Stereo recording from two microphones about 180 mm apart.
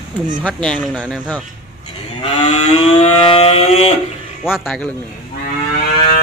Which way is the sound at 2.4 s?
40° left (ahead or behind).